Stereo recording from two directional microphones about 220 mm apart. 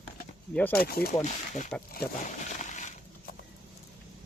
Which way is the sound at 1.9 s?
35° left (ahead or behind).